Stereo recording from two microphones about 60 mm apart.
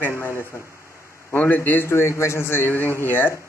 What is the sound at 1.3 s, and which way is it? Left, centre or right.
Speech, left.